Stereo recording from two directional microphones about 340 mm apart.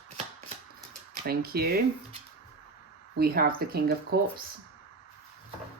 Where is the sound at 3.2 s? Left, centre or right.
Right.